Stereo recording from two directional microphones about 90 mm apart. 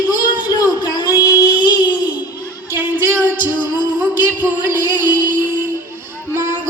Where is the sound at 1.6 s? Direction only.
60° left (ahead or behind).